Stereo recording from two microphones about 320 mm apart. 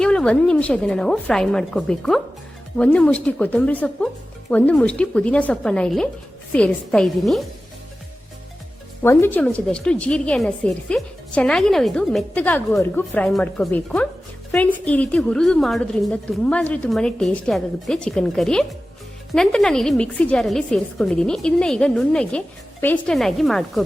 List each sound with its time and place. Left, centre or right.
0.0 s a woman's voice: centre
9.0 s a woman's voice: centre